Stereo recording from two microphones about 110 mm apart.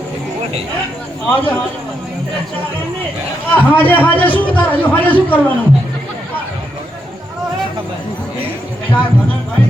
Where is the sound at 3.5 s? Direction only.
15° left (ahead or behind).